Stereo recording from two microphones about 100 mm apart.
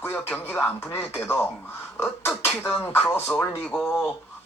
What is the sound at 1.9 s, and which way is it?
Beatboxing, 25° left (ahead or behind).